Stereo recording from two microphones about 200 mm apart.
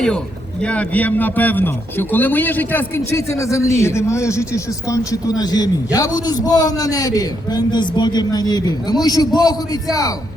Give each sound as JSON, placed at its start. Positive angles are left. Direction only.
{"t": 0.6, "sound": "a man's voice", "side_deg": 5}